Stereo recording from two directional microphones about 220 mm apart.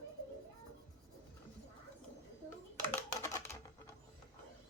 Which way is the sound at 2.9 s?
15° left (ahead or behind).